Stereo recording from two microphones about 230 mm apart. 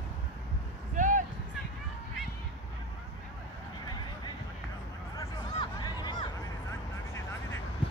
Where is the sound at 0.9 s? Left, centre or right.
Right.